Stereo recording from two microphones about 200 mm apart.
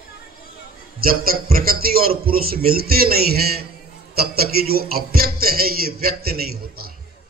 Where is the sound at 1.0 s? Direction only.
45° right (ahead or behind).